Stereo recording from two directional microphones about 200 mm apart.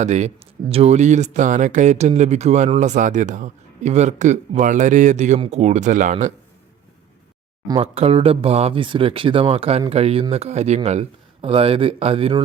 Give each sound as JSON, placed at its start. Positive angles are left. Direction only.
{"t": 0.0, "sound": "speech", "side_deg": -35}
{"t": 7.7, "sound": "speech", "side_deg": -30}